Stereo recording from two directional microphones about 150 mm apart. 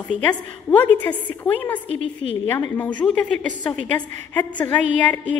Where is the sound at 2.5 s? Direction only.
15° left (ahead or behind).